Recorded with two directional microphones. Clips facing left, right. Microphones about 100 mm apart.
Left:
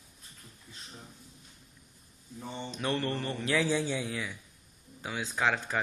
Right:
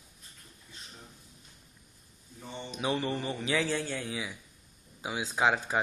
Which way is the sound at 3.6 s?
10° left (ahead or behind).